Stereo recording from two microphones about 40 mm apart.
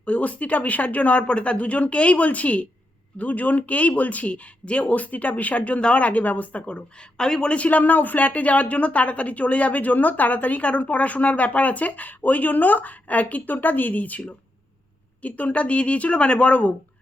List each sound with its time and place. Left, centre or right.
0.0 s a woman's voice: left
4.6 s a woman's voice: left
4.9 s a woman's voice: left
7.2 s a man's voice: centre
7.5 s a woman's voice: left